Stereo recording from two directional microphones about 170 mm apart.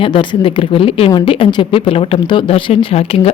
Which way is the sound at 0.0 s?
30° left (ahead or behind).